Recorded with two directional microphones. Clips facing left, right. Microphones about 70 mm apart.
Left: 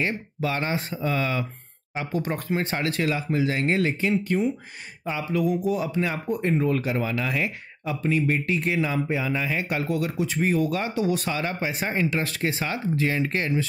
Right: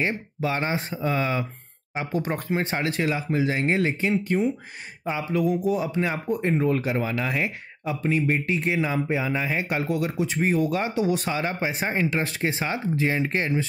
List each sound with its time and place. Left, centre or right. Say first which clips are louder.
0.0 s speech: right 1 dB; centre